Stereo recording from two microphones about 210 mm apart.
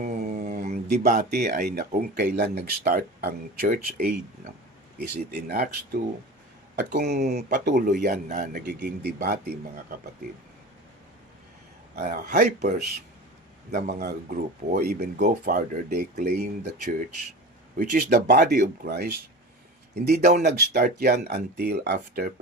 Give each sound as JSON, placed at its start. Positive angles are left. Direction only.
{"t": 0.0, "sound": "a sound", "side_deg": -40}
{"t": 1.9, "sound": "speech", "side_deg": -45}
{"t": 6.9, "sound": "speech", "side_deg": -50}
{"t": 11.9, "sound": "speech", "side_deg": -40}
{"t": 20.4, "sound": "speech", "side_deg": -50}